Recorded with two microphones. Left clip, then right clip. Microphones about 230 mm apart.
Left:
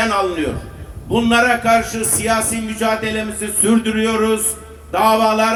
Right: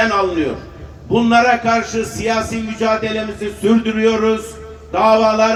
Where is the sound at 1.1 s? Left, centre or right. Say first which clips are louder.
Right 2 dB; left.